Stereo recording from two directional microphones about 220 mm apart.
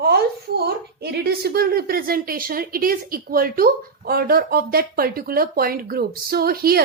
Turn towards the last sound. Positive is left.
turn(degrees=-45)  # may be behind; listen again after turning